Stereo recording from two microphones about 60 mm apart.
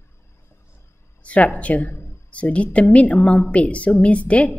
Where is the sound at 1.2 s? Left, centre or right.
Left.